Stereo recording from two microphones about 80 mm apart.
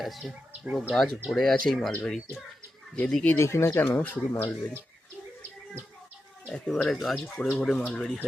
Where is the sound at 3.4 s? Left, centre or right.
Left.